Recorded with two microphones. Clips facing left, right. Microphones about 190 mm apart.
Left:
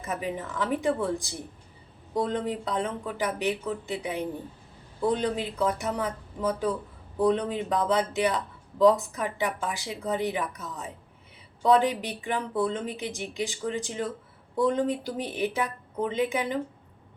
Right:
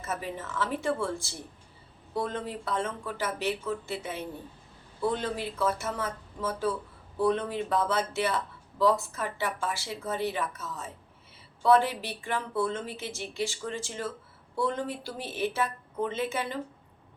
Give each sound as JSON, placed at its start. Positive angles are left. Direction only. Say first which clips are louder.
{"t": 0.0, "sound": "speech", "louder": "left 3 dB", "side_deg": 15}